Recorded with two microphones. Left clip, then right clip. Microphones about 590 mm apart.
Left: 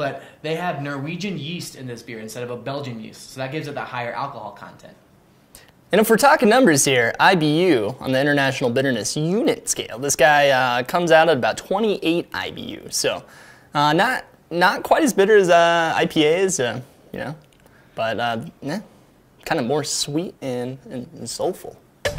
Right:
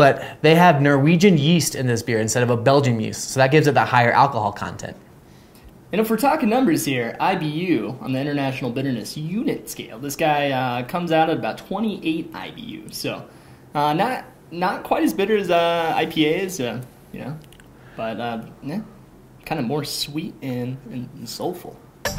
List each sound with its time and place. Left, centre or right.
0.0 s speech: right
5.9 s speech: left
17.9 s speech: left